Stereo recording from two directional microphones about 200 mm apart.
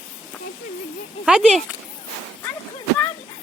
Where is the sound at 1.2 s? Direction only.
Centre (ahead or behind).